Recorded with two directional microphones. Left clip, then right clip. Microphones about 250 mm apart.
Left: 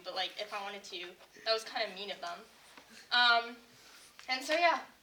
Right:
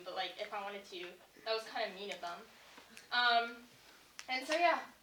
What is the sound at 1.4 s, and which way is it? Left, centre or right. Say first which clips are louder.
Speech: left 4 dB; left.